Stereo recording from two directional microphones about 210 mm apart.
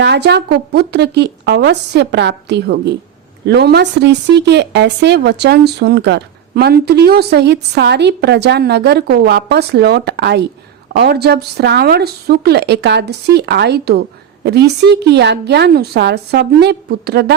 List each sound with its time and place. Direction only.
0.0 s speech: 55° right (ahead or behind)